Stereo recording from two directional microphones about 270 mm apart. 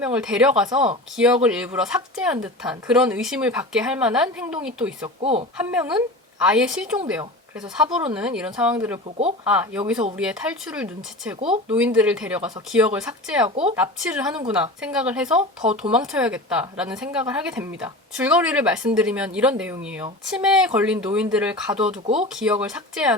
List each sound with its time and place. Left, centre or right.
0.0 s speech: centre
0.7 s speech: centre
1.1 s speech: centre
5.2 s a woman's voice: right
5.5 s speech: centre
9.0 s a woman's voice: right
9.5 s speech: centre
11.3 s a woman's voice: right
11.7 s speech: centre
22.0 s a woman's voice: right
22.4 s speech: centre